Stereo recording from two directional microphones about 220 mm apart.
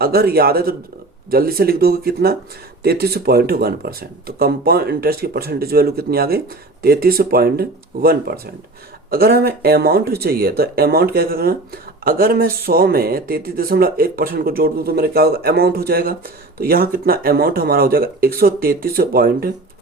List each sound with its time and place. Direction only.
0.0 s speech: 45° right (ahead or behind)